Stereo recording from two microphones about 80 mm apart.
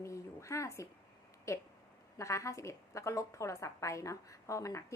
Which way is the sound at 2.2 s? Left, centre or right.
Left.